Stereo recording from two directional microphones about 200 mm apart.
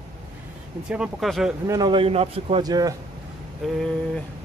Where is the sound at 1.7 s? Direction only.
20° right (ahead or behind).